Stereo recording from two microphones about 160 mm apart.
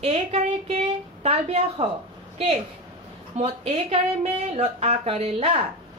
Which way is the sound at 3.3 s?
40° right (ahead or behind).